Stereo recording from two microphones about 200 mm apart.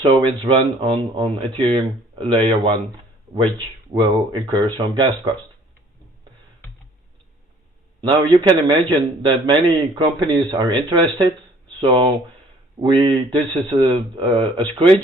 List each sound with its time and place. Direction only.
0.0 s speech: 25° right (ahead or behind)
3.9 s speech: 20° right (ahead or behind)
8.0 s speech: 25° right (ahead or behind)